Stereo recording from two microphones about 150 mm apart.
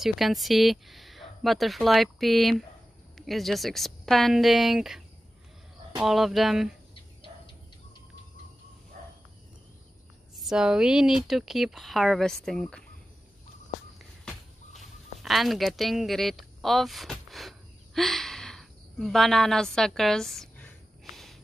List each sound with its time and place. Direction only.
0.0 s speech: centre (ahead or behind)
6.0 s speech: centre (ahead or behind)
9.0 s insect: 55° right (ahead or behind)
10.4 s speech: 5° right (ahead or behind)
13.9 s a sound: centre (ahead or behind)